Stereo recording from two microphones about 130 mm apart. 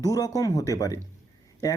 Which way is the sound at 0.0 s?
25° left (ahead or behind).